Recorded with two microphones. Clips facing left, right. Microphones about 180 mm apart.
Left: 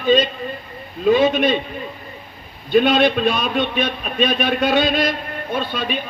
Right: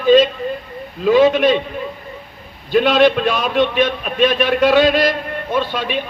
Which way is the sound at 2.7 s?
90° right.